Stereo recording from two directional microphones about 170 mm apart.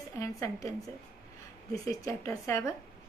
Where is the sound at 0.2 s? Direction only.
20° left (ahead or behind).